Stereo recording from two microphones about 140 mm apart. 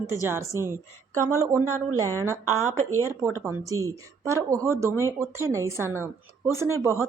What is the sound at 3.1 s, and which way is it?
Speech, 20° right (ahead or behind).